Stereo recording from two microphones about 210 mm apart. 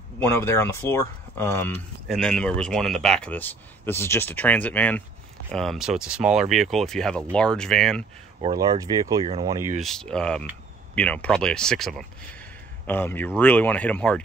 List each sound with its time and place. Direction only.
0.3 s speech: 10° left (ahead or behind)
8.4 s speech: 20° right (ahead or behind)
9.8 s speech: centre (ahead or behind)